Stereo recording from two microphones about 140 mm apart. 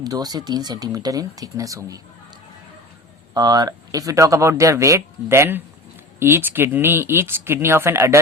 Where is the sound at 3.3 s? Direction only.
30° right (ahead or behind).